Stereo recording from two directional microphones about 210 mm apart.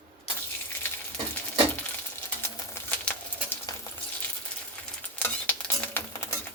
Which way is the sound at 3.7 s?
15° left (ahead or behind).